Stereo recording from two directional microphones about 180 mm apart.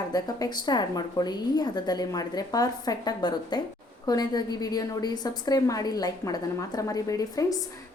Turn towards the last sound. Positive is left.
turn(degrees=20)  # may be behind; listen again after turning